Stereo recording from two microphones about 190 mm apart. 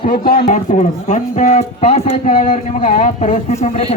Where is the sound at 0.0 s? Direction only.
45° left (ahead or behind).